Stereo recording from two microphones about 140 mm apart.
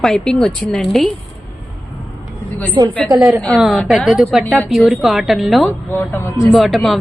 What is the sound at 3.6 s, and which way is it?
Speech, centre (ahead or behind).